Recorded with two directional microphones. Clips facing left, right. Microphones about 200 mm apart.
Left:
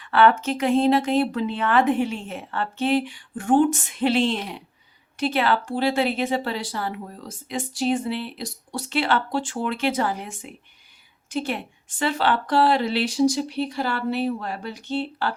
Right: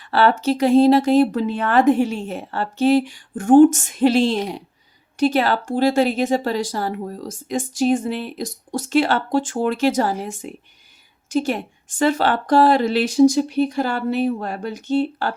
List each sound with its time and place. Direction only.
0.0 s a woman's voice: 35° right (ahead or behind)